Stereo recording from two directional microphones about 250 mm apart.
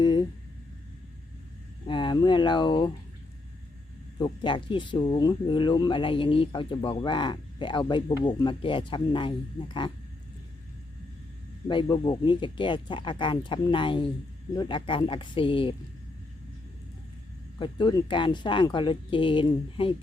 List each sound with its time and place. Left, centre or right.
0.0 s a sound: centre
1.9 s speech: centre
4.2 s speech: centre
11.7 s speech: centre
17.6 s speech: centre